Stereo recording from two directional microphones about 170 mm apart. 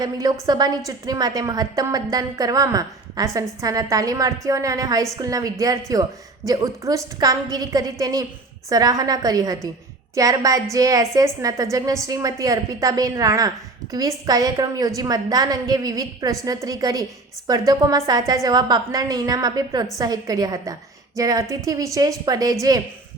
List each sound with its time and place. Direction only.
0.0 s a woman's voice: 20° right (ahead or behind)